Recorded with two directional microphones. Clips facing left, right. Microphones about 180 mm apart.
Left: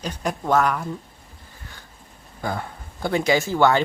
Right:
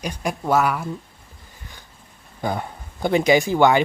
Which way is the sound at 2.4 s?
20° right (ahead or behind).